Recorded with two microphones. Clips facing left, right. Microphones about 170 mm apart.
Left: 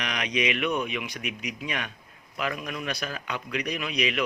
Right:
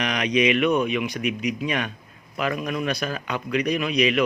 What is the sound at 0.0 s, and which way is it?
Speech, 40° right (ahead or behind).